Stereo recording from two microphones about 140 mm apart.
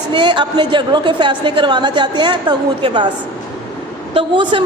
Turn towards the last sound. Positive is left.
turn(degrees=-35)  # may be behind; listen again after turning